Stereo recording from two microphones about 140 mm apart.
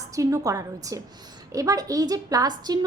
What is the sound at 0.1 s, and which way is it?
A woman's voice, 25° right (ahead or behind).